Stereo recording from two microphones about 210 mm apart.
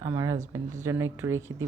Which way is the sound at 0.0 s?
15° right (ahead or behind).